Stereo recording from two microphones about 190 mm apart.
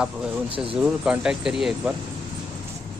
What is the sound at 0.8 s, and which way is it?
Speech, 5° right (ahead or behind).